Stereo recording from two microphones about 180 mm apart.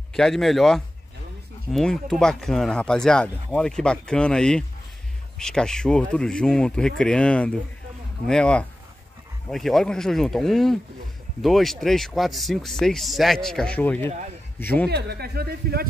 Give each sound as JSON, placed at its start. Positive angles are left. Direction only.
{"t": 0.1, "sound": "a man's voice", "side_deg": 0}
{"t": 14.9, "sound": "a man's voice", "side_deg": -65}